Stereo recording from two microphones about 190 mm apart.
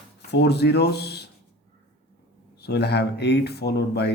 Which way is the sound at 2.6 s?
60° left (ahead or behind).